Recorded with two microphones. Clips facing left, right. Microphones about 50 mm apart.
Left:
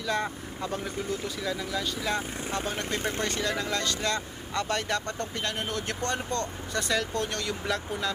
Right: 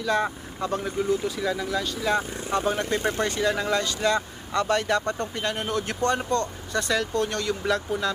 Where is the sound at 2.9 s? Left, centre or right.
Right.